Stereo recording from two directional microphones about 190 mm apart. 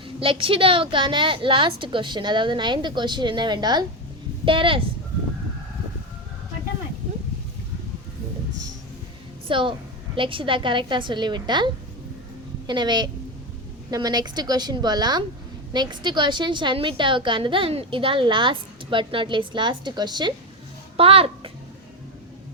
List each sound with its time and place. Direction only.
0.2 s a woman's voice: 30° right (ahead or behind)
9.5 s a woman's voice: 25° right (ahead or behind)